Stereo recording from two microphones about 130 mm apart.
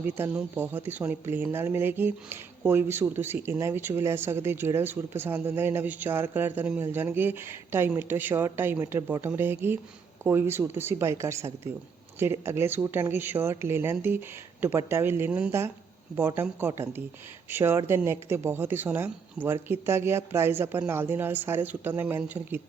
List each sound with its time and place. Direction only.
0.0 s speech: 15° right (ahead or behind)